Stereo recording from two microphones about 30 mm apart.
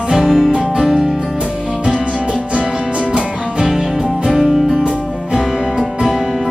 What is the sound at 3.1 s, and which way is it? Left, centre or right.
Music, right.